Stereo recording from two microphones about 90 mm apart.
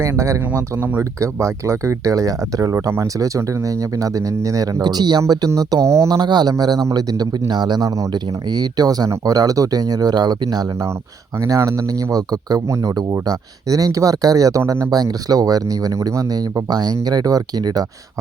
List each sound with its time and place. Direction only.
0.0 s speech: 35° right (ahead or behind); by 7.9 s 50° right (ahead or behind)
7.9 s speech: 35° right (ahead or behind)
8.1 s speech: 50° right (ahead or behind)